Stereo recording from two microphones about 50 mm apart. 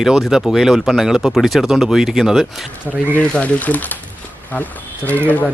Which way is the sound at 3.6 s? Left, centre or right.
Left.